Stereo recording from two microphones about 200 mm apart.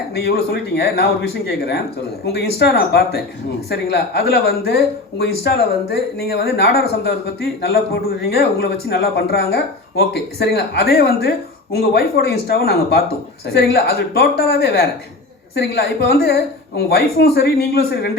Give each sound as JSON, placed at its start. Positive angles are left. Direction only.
{"t": 0.1, "sound": "speech", "side_deg": 50}
{"t": 8.2, "sound": "speech", "side_deg": 55}